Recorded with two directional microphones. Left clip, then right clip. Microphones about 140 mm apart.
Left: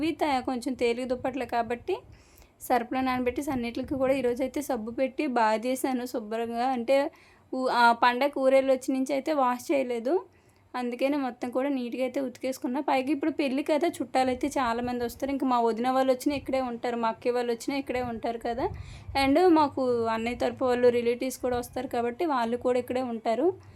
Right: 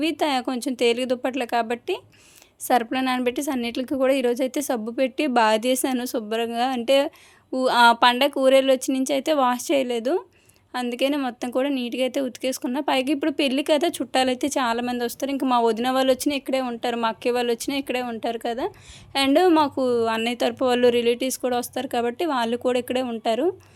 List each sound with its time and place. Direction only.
0.0 s speech: 20° right (ahead or behind)